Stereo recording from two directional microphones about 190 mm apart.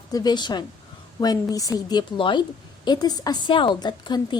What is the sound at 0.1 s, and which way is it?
A woman's voice, 20° left (ahead or behind).